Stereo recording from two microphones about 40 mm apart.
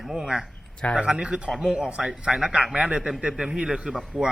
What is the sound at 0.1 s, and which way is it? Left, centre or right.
A man's voice, centre.